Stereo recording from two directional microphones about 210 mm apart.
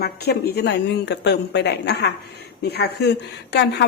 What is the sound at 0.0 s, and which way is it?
A woman's voice, 50° left (ahead or behind).